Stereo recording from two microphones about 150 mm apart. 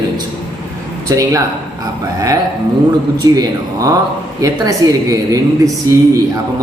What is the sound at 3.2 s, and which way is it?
A woman's voice, 25° right (ahead or behind).